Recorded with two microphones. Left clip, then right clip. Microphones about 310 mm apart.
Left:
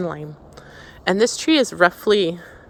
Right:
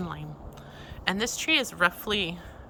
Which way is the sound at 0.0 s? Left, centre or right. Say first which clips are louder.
Left 11 dB; centre.